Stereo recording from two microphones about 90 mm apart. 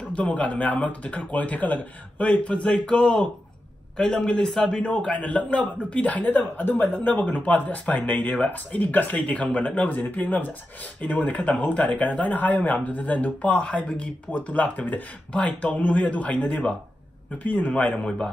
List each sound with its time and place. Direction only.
0.1 s a man's voice: 15° left (ahead or behind)